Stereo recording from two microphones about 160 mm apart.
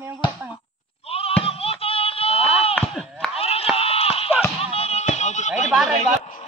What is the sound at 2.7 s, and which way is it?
Chop, centre (ahead or behind).